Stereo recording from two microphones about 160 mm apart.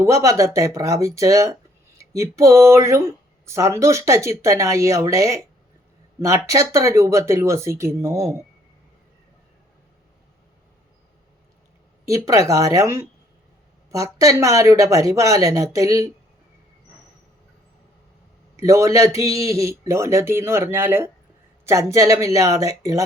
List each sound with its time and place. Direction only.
0.0 s speech: 20° right (ahead or behind)
12.0 s speech: 20° right (ahead or behind)
18.5 s speech: 20° right (ahead or behind)